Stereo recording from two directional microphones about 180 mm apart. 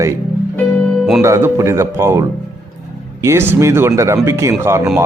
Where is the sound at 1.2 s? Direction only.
15° right (ahead or behind).